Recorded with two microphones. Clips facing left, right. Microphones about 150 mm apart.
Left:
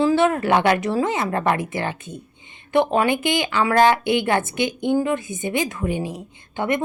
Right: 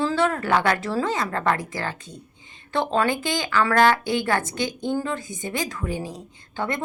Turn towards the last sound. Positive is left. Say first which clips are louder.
# left 5 dB
turn(degrees=20)  # may be behind; listen again after turning